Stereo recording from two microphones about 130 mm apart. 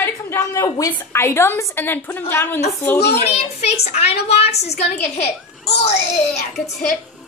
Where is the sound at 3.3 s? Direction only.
55° left (ahead or behind).